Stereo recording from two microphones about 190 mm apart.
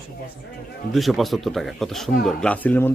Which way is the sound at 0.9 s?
Centre (ahead or behind).